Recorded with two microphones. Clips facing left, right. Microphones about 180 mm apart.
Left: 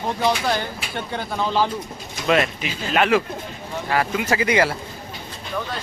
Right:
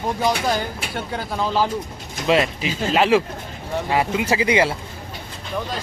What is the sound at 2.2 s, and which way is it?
Speech, 20° right (ahead or behind).